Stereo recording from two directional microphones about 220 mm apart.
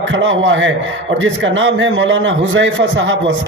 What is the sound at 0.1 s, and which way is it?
A man's voice, 60° right (ahead or behind).